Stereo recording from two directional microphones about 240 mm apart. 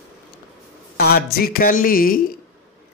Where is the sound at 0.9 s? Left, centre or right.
Left.